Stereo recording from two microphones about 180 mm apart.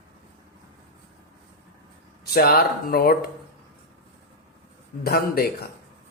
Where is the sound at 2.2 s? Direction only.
60° left (ahead or behind).